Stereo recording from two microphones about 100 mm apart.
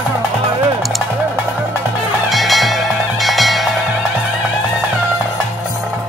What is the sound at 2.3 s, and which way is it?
Music, centre (ahead or behind).